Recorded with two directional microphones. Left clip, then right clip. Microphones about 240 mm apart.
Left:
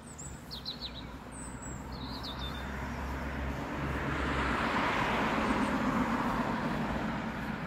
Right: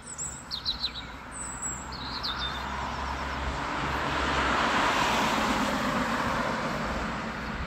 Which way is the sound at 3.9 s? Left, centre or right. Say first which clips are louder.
Right 6 dB; right.